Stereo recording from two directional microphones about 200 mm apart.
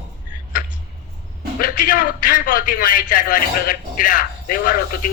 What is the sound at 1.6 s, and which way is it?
A man's voice, 40° left (ahead or behind).